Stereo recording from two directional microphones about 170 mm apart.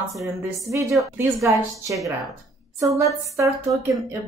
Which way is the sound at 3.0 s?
15° right (ahead or behind).